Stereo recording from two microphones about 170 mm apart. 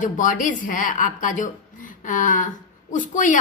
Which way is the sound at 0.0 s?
50° left (ahead or behind).